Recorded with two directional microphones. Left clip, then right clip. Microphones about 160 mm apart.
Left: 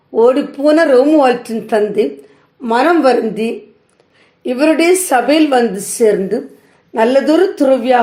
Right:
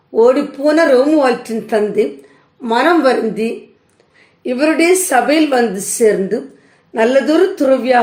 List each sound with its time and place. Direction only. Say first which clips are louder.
0.1 s speech: even; 30° left (ahead or behind)